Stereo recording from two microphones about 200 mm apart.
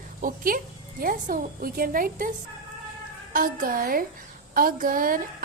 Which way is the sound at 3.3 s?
45° right (ahead or behind).